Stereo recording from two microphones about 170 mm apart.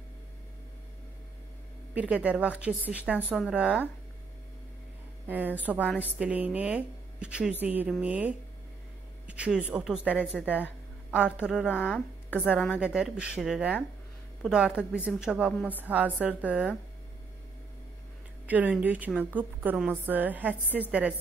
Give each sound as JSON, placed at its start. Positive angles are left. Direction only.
{"t": 2.0, "sound": "a woman's voice", "side_deg": -10}
{"t": 5.2, "sound": "a woman's voice", "side_deg": -10}
{"t": 11.7, "sound": "speech", "side_deg": 5}
{"t": 12.3, "sound": "a woman's voice", "side_deg": -5}
{"t": 18.5, "sound": "a woman's voice", "side_deg": -10}